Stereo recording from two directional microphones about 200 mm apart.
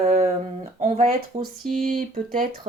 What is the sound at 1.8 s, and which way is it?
Speech, 45° right (ahead or behind).